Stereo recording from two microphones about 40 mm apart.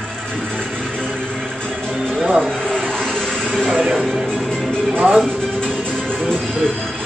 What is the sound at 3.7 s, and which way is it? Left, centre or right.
Music, centre.